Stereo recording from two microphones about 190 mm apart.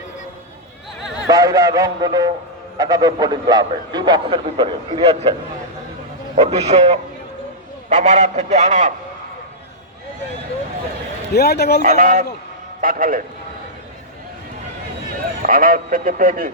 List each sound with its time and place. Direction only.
1.3 s a man's voice: 20° right (ahead or behind); by 8.9 s 40° right (ahead or behind)
11.3 s a man's voice: 55° left (ahead or behind)
11.8 s speech: 45° right (ahead or behind)
15.4 s speech: 50° right (ahead or behind)